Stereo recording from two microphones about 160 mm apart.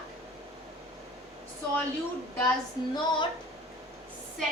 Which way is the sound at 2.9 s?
30° left (ahead or behind).